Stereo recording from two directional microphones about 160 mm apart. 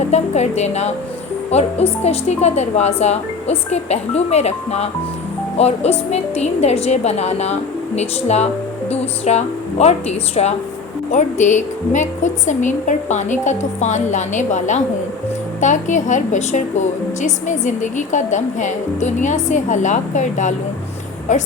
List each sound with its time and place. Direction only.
0.0 s a woman's voice: 45° left (ahead or behind)